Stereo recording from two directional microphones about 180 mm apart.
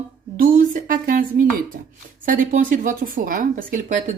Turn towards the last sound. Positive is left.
turn(degrees=-45)  # may be behind; listen again after turning